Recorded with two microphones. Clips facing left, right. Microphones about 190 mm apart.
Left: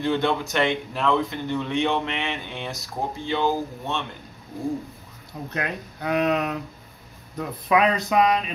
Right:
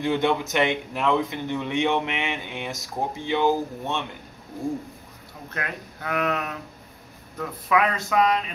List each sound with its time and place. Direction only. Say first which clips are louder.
0.0 s speech: even; 15° right (ahead or behind)
5.5 s speech: left 3 dB; 20° left (ahead or behind)